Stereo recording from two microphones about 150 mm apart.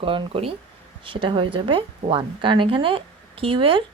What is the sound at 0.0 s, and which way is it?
A woman's voice, 35° right (ahead or behind).